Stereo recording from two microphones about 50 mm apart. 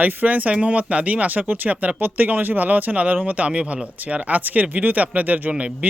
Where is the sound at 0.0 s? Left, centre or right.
Right.